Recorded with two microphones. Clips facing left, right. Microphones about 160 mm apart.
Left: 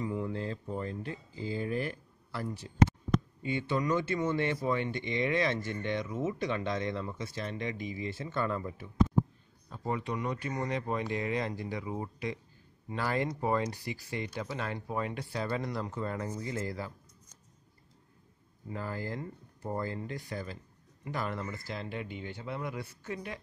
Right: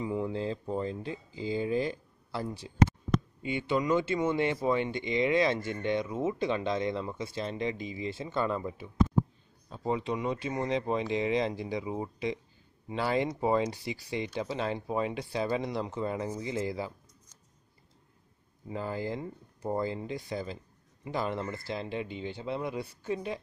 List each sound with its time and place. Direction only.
0.0 s speech: 20° right (ahead or behind)
18.7 s speech: 20° right (ahead or behind)